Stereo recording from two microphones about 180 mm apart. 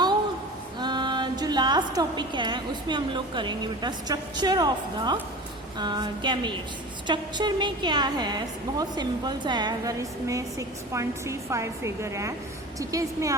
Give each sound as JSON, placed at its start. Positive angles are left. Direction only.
{"t": 0.8, "sound": "a woman's voice", "side_deg": -25}